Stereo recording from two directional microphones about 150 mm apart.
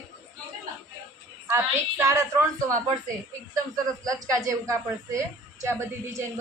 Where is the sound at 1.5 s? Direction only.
20° right (ahead or behind).